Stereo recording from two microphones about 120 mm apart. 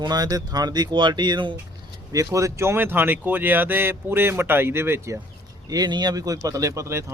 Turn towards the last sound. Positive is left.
turn(degrees=-25)  # may be behind; listen again after turning